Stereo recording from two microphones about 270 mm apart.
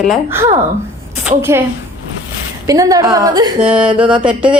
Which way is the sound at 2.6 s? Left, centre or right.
Centre.